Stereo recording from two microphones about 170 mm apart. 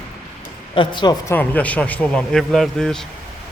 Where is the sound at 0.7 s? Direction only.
30° left (ahead or behind).